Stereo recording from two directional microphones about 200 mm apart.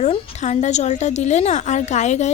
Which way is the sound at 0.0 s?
35° left (ahead or behind).